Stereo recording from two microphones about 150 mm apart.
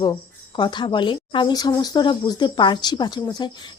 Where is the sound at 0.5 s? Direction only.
30° left (ahead or behind).